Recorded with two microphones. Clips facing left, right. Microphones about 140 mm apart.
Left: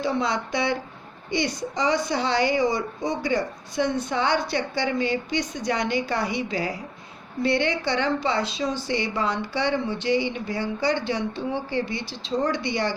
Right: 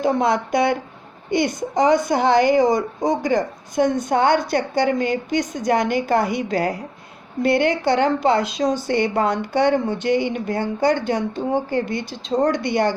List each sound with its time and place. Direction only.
0.0 s speech: 50° right (ahead or behind)